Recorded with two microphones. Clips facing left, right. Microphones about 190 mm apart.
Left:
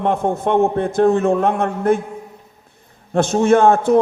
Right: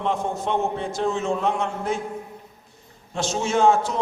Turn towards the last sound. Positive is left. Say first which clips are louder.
# left 7 dB
turn(degrees=55)  # may be behind; listen again after turning